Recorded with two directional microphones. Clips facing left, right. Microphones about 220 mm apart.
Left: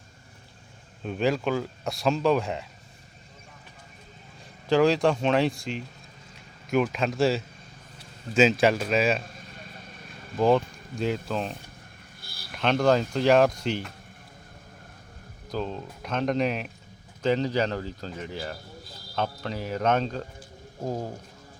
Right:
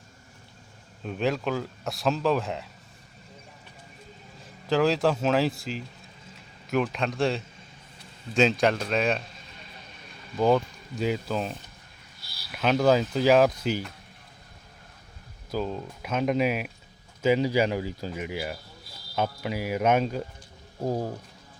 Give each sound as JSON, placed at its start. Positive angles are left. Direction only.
{"t": 1.0, "sound": "speech", "side_deg": 0}
{"t": 4.7, "sound": "speech", "side_deg": 0}
{"t": 10.3, "sound": "speech", "side_deg": 0}
{"t": 12.2, "sound": "a sound", "side_deg": 50}
{"t": 12.5, "sound": "speech", "side_deg": -5}
{"t": 15.5, "sound": "speech", "side_deg": -5}